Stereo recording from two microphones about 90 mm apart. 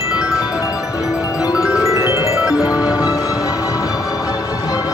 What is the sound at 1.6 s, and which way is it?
Music, 5° right (ahead or behind).